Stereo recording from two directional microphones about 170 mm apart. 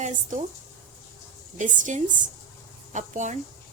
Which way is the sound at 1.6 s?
45° right (ahead or behind).